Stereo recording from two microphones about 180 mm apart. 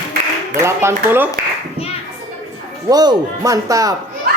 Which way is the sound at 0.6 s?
15° right (ahead or behind).